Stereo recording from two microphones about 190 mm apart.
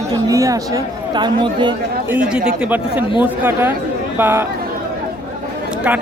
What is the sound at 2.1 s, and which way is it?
Speech, 5° right (ahead or behind).